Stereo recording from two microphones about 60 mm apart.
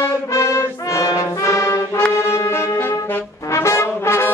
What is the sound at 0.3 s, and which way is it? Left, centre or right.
Brass instrument, left.